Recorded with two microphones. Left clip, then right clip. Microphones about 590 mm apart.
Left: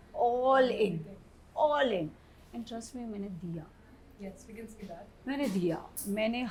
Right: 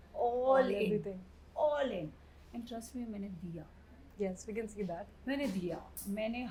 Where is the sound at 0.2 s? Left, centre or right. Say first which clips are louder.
Left 4 dB; left.